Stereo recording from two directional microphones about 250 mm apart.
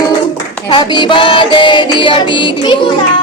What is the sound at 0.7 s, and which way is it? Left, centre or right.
Music, centre.